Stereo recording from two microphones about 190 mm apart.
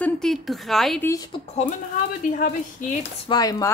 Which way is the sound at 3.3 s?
20° left (ahead or behind).